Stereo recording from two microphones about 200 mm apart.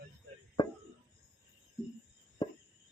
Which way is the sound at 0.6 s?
20° left (ahead or behind).